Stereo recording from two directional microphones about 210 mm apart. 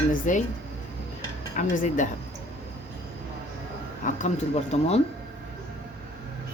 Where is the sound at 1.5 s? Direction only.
40° left (ahead or behind).